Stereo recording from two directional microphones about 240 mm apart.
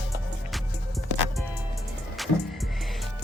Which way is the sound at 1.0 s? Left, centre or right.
Centre.